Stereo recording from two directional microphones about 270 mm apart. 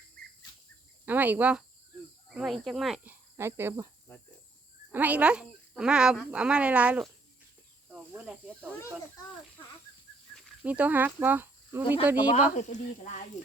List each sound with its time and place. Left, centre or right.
0.2 s bird: right
1.0 s speech: centre
4.9 s speech: centre
8.1 s speech: centre
10.3 s speech: centre
12.3 s speech: left